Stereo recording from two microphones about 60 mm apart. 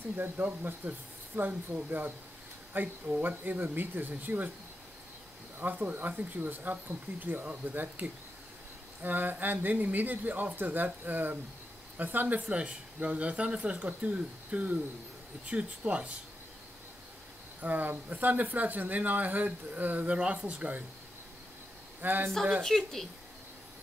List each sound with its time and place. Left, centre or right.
0.1 s speech: right
5.6 s speech: right
12.4 s speech: centre
17.6 s speech: right
22.0 s speech: right
22.6 s speech: centre